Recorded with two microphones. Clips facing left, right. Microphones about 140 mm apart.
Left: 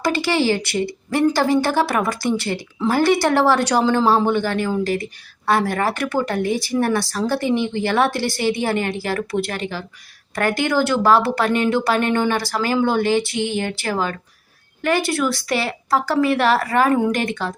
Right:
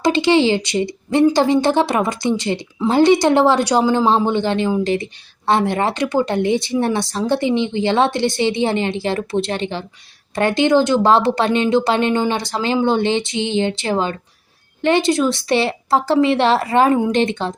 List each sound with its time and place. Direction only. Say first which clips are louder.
0.0 s a woman's voice: right 5 dB; 20° right (ahead or behind)